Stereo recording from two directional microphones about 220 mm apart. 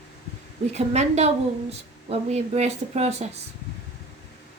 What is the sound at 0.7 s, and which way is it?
A woman's voice, 30° right (ahead or behind).